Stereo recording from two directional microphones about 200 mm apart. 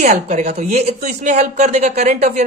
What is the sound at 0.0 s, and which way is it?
Speech, 35° right (ahead or behind).